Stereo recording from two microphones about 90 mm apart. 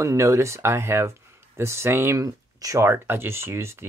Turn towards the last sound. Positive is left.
turn(degrees=-30)  # may be behind; listen again after turning